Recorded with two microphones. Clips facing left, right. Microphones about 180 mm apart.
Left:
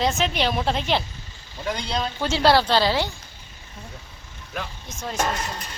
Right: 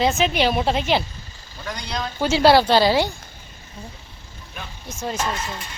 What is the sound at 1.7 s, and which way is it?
Speech, 25° left (ahead or behind).